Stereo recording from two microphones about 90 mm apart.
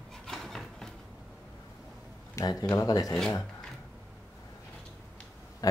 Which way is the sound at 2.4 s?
35° left (ahead or behind).